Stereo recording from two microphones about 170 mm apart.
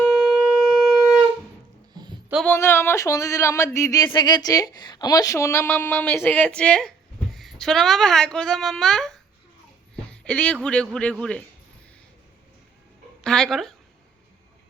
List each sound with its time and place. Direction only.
0.0 s shofar: centre (ahead or behind)
0.7 s wind instrument: centre (ahead or behind)
1.9 s music: 25° right (ahead or behind)
2.5 s a sound: 15° left (ahead or behind)
7.3 s a woman's voice: centre (ahead or behind)
13.2 s speech: 5° left (ahead or behind)